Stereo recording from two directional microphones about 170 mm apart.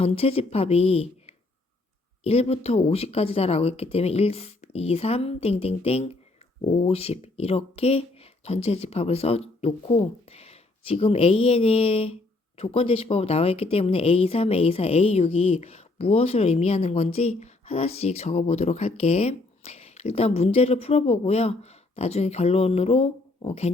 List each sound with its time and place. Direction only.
0.0 s speech: 35° left (ahead or behind)